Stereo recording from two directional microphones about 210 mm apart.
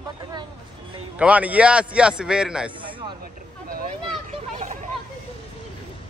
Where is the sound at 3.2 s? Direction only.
45° right (ahead or behind).